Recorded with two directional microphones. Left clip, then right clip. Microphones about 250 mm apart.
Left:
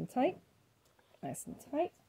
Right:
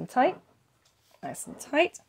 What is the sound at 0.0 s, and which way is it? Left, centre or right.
A woman's voice, right.